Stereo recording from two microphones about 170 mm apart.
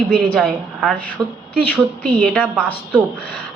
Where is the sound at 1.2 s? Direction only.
20° right (ahead or behind).